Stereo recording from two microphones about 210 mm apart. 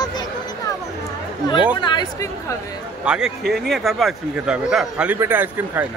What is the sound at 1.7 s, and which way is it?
Speech, 20° left (ahead or behind).